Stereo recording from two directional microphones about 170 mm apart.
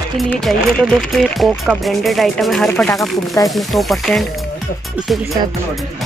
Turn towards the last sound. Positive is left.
turn(degrees=0)  # may be behind; listen again after turning